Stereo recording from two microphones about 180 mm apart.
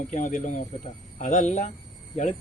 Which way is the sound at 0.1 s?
45° left (ahead or behind).